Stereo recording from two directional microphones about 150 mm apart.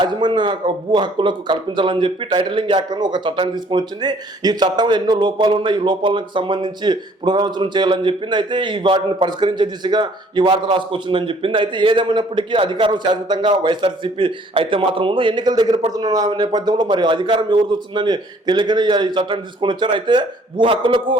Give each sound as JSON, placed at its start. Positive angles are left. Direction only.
{"t": 0.0, "sound": "speech", "side_deg": -30}